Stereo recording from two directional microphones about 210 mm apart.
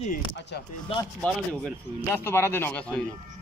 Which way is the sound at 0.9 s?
25° left (ahead or behind).